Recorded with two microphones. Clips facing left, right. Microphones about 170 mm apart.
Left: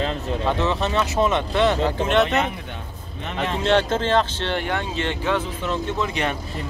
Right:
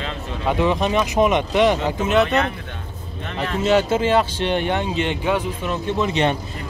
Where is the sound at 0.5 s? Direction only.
10° right (ahead or behind).